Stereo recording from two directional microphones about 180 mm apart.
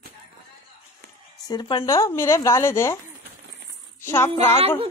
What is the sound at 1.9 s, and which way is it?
Speech, 15° left (ahead or behind).